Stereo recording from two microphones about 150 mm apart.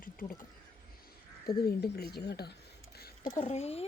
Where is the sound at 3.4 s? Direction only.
45° left (ahead or behind).